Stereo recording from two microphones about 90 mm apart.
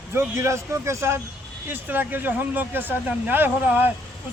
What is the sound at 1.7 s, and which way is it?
Speech, 20° right (ahead or behind).